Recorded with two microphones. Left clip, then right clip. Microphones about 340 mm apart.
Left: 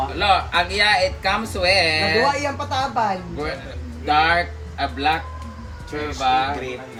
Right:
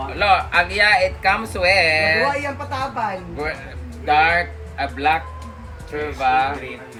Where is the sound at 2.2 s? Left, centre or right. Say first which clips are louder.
Left 1 dB; left.